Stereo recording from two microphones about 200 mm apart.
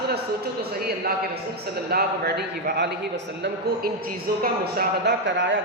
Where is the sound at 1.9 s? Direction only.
50° right (ahead or behind).